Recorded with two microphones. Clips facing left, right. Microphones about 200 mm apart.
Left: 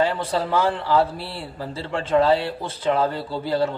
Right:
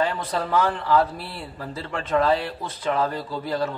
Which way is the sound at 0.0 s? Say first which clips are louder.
Left 3 dB; 30° left (ahead or behind).